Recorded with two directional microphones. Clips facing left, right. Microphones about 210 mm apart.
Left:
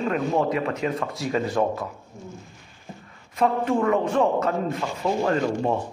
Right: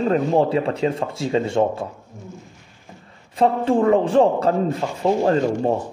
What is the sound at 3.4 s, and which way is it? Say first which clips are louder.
A man's voice: right 4 dB; 30° right (ahead or behind).